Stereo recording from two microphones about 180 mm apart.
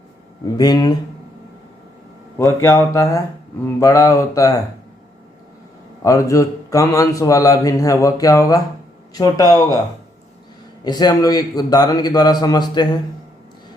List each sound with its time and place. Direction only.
0.5 s a man's voice: 20° left (ahead or behind)
2.4 s speech: 15° left (ahead or behind)
6.0 s a man's voice: 20° left (ahead or behind)
10.8 s a man's voice: 20° left (ahead or behind)